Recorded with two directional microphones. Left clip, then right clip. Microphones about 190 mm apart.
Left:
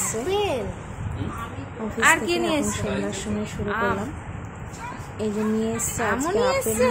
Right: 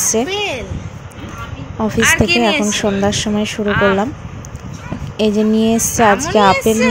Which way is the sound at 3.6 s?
5° left (ahead or behind).